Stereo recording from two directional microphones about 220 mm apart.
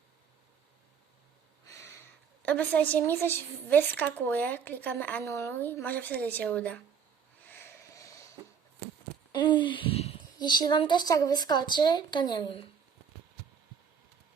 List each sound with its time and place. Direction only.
1.6 s a woman's voice: 10° left (ahead or behind)
7.4 s a sound: 10° left (ahead or behind)
9.3 s a woman's voice: 20° left (ahead or behind)